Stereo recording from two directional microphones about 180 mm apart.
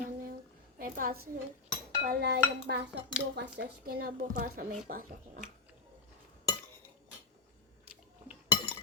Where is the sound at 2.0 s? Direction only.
60° right (ahead or behind).